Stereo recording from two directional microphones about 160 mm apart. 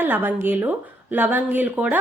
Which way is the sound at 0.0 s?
10° right (ahead or behind).